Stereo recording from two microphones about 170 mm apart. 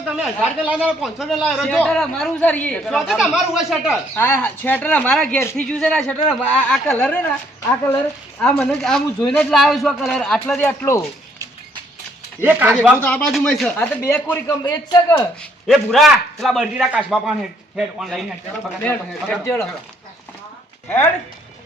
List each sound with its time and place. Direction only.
0.2 s a man's voice: 5° right (ahead or behind)
4.1 s speech: 10° left (ahead or behind)
8.4 s a man's voice: 5° left (ahead or behind)
12.4 s speech: 10° right (ahead or behind)
13.0 s speech: 10° left (ahead or behind)
14.6 s a man's voice: 25° left (ahead or behind)
15.6 s a man's voice: centre (ahead or behind)
18.8 s speech: 10° left (ahead or behind)